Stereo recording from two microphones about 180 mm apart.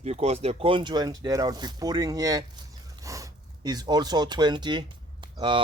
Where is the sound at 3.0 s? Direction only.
20° right (ahead or behind).